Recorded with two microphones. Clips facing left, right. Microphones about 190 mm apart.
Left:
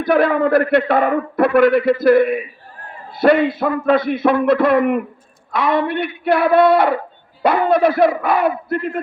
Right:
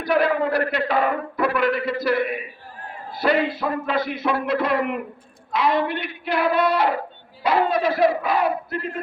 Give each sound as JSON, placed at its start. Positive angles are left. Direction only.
{"t": 0.0, "sound": "a man's voice", "side_deg": 55}